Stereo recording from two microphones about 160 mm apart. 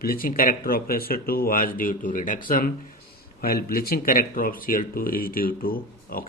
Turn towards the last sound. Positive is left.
turn(degrees=65)  # may be behind; listen again after turning